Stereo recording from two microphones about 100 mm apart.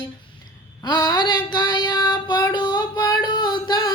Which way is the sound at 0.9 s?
45° left (ahead or behind).